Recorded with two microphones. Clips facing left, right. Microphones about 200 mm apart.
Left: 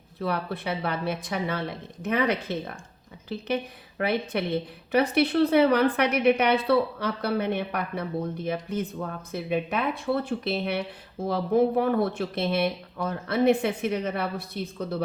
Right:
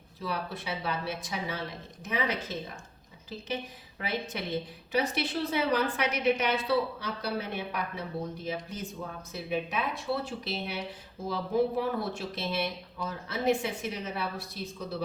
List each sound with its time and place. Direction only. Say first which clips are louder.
0.2 s a woman's voice: left 6 dB; 60° left (ahead or behind)